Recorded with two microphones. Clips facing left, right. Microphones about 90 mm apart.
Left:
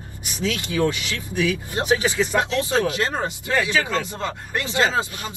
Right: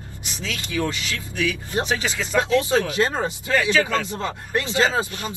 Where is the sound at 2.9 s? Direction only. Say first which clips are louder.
Right 2 dB; 20° right (ahead or behind).